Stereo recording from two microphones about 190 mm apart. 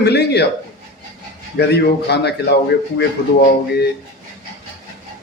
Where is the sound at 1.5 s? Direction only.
60° left (ahead or behind).